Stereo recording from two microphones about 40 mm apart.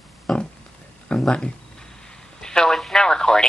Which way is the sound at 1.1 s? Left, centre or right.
Left.